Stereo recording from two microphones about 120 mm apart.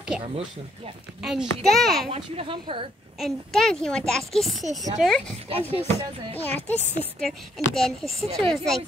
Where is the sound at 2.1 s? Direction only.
50° right (ahead or behind).